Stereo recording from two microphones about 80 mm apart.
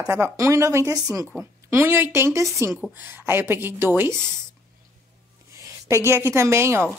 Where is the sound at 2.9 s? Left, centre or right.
Right.